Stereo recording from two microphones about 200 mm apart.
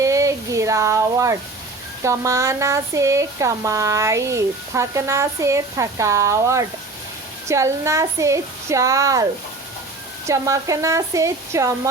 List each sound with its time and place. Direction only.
0.0 s a sound: 15° right (ahead or behind)
2.0 s speech: 15° right (ahead or behind)
10.2 s speech: 15° right (ahead or behind)